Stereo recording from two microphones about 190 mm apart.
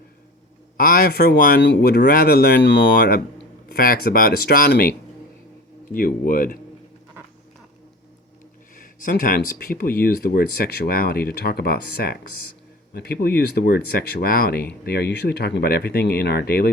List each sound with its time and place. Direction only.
0.8 s speech: 50° left (ahead or behind)
5.9 s speech: 50° left (ahead or behind)
8.7 s speech: 50° left (ahead or behind)